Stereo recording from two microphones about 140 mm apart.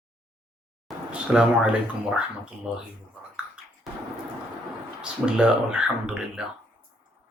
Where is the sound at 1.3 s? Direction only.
5° right (ahead or behind).